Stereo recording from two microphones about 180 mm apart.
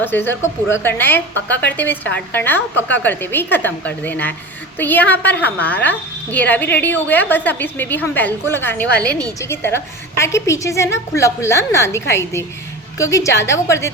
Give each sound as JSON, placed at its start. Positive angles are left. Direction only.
{"t": 0.0, "sound": "a woman's voice", "side_deg": 10}